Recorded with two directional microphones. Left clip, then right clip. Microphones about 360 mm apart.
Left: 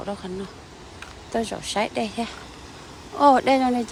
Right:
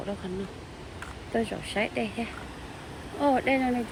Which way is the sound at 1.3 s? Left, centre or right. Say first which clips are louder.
Left 4 dB; centre.